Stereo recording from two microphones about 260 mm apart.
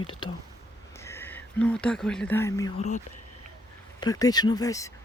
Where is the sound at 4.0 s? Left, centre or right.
Centre.